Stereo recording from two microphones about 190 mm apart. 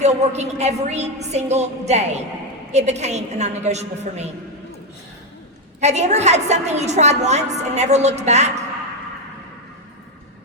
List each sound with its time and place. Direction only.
0.0 s a woman's voice: 35° right (ahead or behind)
5.8 s a woman's voice: 35° right (ahead or behind)